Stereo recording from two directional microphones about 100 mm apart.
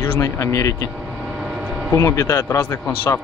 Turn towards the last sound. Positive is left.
turn(degrees=30)  # may be behind; listen again after turning